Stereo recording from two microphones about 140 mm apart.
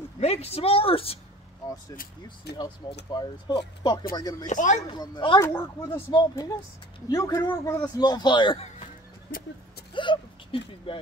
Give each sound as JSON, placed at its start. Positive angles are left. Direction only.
{"t": 0.2, "sound": "a woman's voice", "side_deg": 50}
{"t": 2.2, "sound": "a man's voice", "side_deg": 35}
{"t": 4.5, "sound": "speech", "side_deg": 60}
{"t": 4.9, "sound": "a man's voice", "side_deg": 30}
{"t": 9.9, "sound": "hiccup", "side_deg": 35}